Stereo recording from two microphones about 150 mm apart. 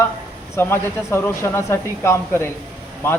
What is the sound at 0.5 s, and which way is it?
Speech, 15° left (ahead or behind).